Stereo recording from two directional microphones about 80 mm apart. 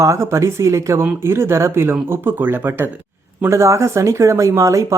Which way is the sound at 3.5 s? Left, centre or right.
Right.